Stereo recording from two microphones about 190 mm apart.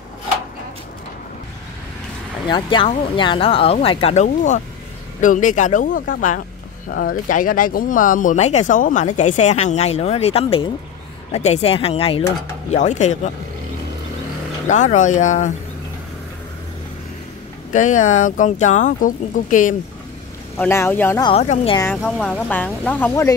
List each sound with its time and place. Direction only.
2.4 s speech: 25° left (ahead or behind)
14.7 s speech: 40° left (ahead or behind)
17.7 s speech: 40° left (ahead or behind)
20.5 s speech: 10° left (ahead or behind)
21.2 s speech: 30° left (ahead or behind)
21.9 s speech: 5° left (ahead or behind)